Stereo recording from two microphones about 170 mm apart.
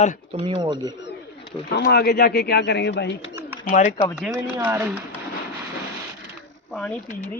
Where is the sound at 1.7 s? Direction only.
70° left (ahead or behind); by 3.2 s 90° left.